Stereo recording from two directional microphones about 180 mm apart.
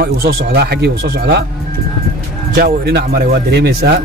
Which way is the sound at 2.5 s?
60° right (ahead or behind).